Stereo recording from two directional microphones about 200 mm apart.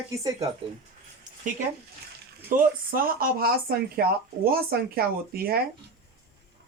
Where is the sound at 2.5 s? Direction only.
45° right (ahead or behind).